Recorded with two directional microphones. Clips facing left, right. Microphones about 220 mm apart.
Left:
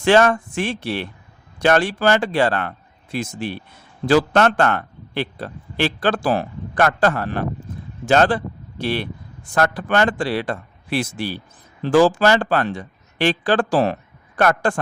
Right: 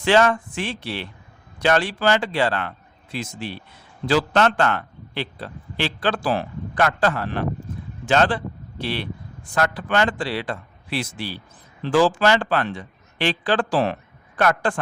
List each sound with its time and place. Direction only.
0.0 s a man's voice: 50° left (ahead or behind)